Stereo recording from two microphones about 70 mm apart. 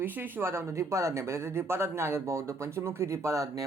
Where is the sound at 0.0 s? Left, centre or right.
Right.